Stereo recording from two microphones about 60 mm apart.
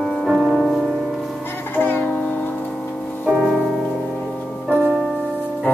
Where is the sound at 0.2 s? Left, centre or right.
Centre.